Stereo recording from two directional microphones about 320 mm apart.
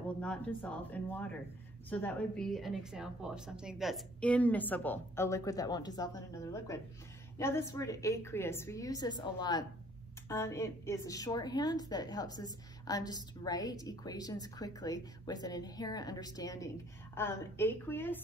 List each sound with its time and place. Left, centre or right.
0.2 s a woman's voice: centre